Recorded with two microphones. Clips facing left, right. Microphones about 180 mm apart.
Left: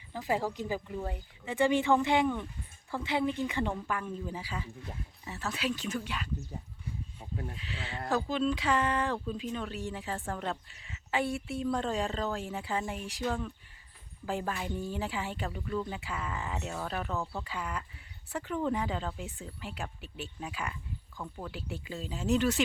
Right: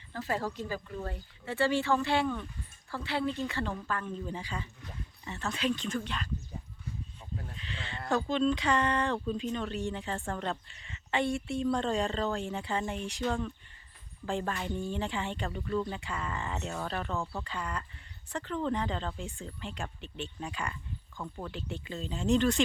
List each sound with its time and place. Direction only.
0.1 s speech: 15° left (ahead or behind)
7.5 s speech: 5° left (ahead or behind)